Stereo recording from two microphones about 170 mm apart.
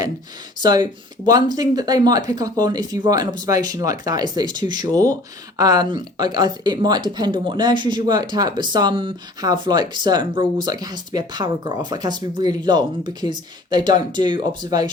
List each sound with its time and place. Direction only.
0.6 s speech: 25° right (ahead or behind)